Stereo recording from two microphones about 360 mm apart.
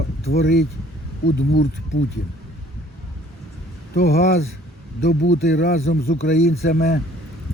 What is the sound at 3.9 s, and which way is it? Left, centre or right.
Speech, left.